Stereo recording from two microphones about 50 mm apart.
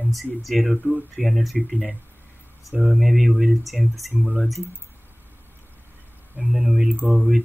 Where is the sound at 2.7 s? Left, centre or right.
Centre.